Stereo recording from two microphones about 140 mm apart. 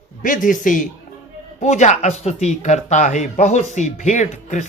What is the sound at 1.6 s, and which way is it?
A man's voice, 55° left (ahead or behind).